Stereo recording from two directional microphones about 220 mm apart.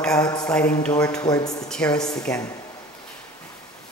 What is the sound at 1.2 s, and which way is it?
Speech, 15° left (ahead or behind).